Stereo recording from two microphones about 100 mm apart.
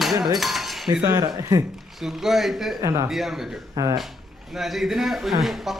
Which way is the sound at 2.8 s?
30° right (ahead or behind).